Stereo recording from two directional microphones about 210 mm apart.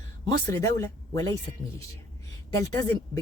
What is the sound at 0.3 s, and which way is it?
Speech, 15° left (ahead or behind).